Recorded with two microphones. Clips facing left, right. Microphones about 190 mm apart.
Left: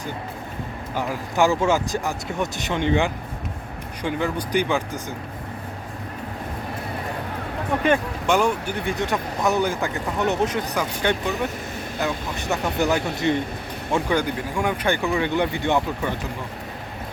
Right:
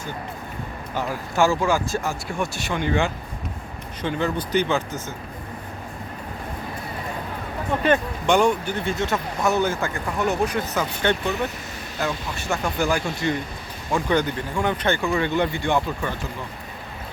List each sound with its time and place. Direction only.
0.9 s speech: 15° left (ahead or behind)
7.9 s speech: 5° left (ahead or behind)
8.8 s speech: 15° left (ahead or behind)
11.0 s speech: 10° left (ahead or behind)
14.1 s speech: 10° left (ahead or behind)